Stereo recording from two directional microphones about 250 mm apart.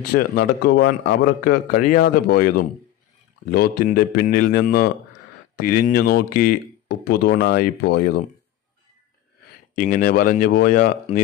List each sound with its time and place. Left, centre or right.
0.1 s speech: left
9.8 s speech: left